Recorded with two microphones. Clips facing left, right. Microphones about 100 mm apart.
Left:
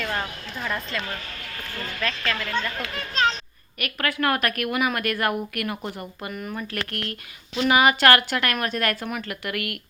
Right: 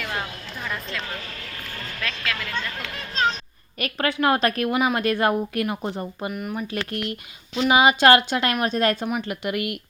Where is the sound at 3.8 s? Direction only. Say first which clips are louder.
Right 3 dB; 30° right (ahead or behind).